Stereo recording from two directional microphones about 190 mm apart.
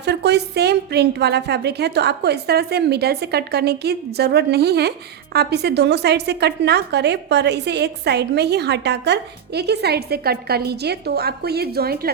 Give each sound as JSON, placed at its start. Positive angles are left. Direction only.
{"t": 0.0, "sound": "a woman's voice", "side_deg": -60}